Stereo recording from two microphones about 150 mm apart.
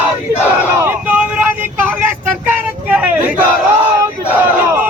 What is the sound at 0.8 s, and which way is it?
Vehicle, 10° right (ahead or behind).